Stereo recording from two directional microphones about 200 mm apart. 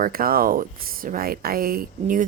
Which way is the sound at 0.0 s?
45° right (ahead or behind).